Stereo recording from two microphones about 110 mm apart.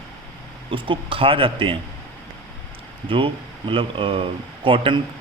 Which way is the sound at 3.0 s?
50° right (ahead or behind).